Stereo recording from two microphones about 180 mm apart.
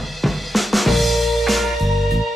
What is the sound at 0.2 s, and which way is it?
Music, centre (ahead or behind).